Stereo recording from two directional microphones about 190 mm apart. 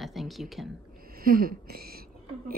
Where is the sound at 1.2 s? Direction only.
50° right (ahead or behind).